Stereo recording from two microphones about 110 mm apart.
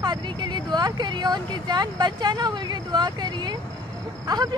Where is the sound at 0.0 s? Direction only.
40° right (ahead or behind).